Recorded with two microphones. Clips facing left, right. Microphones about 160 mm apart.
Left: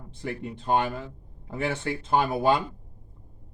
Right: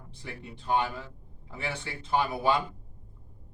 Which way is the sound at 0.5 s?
50° left (ahead or behind).